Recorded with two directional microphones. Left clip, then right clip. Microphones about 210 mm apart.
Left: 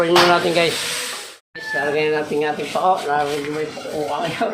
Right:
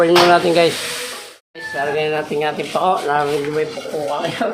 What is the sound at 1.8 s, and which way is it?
Speech, 15° right (ahead or behind).